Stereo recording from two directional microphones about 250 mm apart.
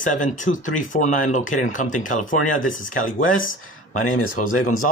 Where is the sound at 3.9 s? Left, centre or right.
Left.